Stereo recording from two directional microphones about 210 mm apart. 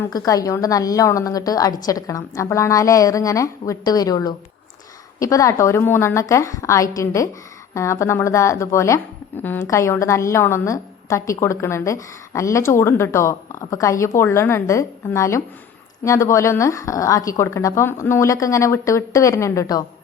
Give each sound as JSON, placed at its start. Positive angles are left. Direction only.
{"t": 0.3, "sound": "a woman's voice", "side_deg": 15}